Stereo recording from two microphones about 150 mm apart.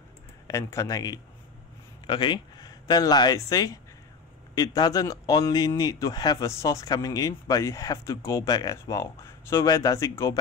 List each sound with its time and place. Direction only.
0.5 s speech: 20° left (ahead or behind)